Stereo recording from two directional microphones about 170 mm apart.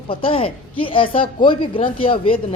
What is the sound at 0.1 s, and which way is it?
A woman's voice, 30° left (ahead or behind).